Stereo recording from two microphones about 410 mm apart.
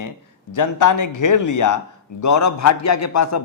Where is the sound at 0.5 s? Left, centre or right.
Left.